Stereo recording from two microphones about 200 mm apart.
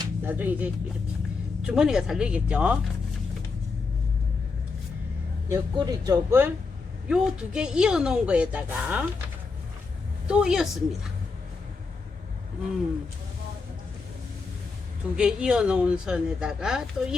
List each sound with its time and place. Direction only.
0.0 s music: 10° right (ahead or behind)
1.6 s speech: 5° right (ahead or behind)
5.5 s speech: 15° right (ahead or behind)
10.2 s speech: 5° right (ahead or behind)
15.1 s speech: 5° right (ahead or behind)